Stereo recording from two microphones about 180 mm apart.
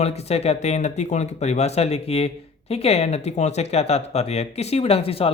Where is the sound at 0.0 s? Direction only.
35° left (ahead or behind).